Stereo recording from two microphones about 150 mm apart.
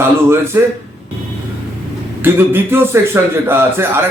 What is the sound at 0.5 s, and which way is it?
Speech, 15° right (ahead or behind).